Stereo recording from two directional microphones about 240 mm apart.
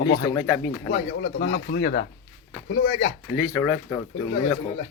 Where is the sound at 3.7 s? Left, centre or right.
Centre.